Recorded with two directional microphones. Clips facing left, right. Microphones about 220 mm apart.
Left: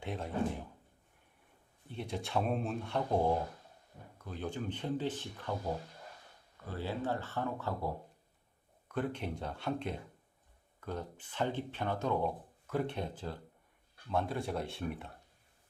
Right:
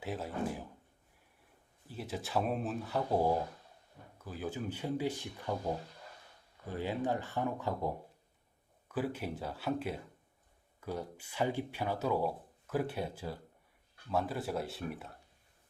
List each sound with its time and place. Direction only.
0.0 s speech: 5° right (ahead or behind)
1.9 s speech: 5° right (ahead or behind)
6.7 s speech: 15° right (ahead or behind)